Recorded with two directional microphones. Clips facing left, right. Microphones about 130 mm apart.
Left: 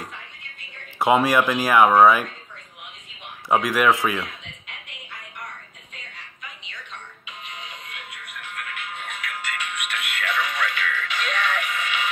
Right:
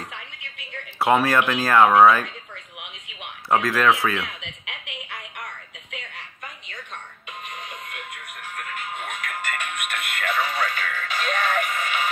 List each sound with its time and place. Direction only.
0.9 s speech: 15° left (ahead or behind)
3.4 s speech: 15° left (ahead or behind)
4.4 s music: 75° right (ahead or behind)
7.2 s music: 50° right (ahead or behind)